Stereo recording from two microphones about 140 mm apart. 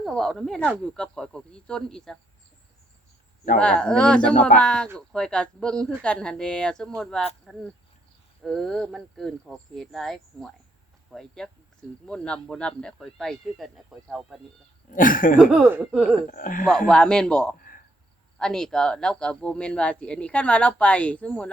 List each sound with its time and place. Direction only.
0.0 s speech: centre (ahead or behind)
3.6 s speech: 5° left (ahead or behind)
4.4 s speech: 60° left (ahead or behind)
4.6 s speech: 5° left (ahead or behind)
14.8 s speech: 75° left (ahead or behind)
15.8 s speech: 5° right (ahead or behind)
16.3 s speech: 80° left
16.6 s speech: 5° left (ahead or behind)
17.6 s cricket: 80° left
18.3 s speech: 5° left (ahead or behind)